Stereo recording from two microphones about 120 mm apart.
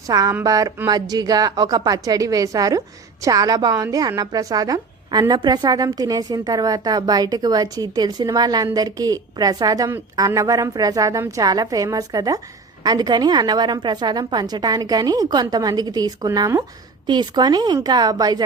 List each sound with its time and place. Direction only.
0.1 s a woman's voice: 30° right (ahead or behind)